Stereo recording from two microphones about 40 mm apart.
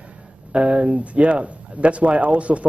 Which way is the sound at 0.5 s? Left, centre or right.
Right.